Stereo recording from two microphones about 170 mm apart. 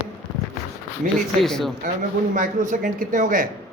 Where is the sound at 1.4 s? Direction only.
5° left (ahead or behind).